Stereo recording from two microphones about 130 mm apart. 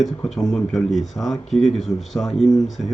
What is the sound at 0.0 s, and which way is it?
Speech, centre (ahead or behind).